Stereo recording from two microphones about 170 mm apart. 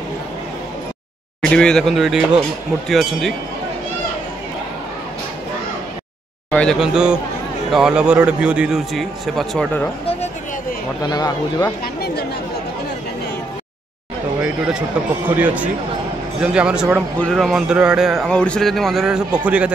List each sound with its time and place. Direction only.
1.4 s speech: 5° left (ahead or behind)
6.5 s speech: 5° left (ahead or behind)
11.0 s speech: 20° left (ahead or behind)
11.8 s chatter: 65° left (ahead or behind)
15.2 s speech: 10° right (ahead or behind)